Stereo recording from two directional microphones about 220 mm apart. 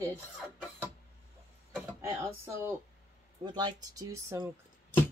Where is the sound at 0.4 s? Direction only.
Centre (ahead or behind).